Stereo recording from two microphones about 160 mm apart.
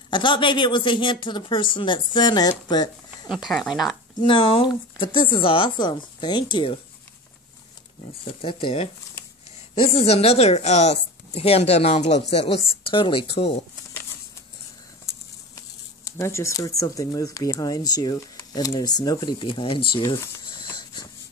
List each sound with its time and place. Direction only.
0.1 s speech: 30° left (ahead or behind)
3.4 s speech: centre (ahead or behind)
4.2 s speech: 35° left (ahead or behind)
8.2 s speech: 35° left (ahead or behind)
9.9 s speech: 40° left (ahead or behind)
15.0 s speech: 20° left (ahead or behind)